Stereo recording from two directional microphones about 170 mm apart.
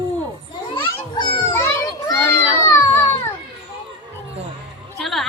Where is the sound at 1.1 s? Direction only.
20° left (ahead or behind).